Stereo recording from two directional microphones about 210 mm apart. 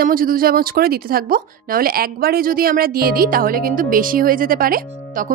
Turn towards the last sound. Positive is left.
turn(degrees=-40)  # may be behind; listen again after turning